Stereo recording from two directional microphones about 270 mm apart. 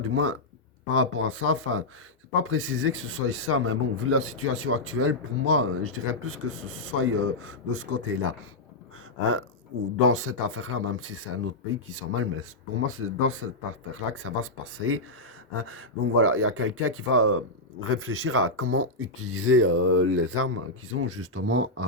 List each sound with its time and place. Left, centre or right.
0.0 s a man's voice: right
10.0 s a man's voice: right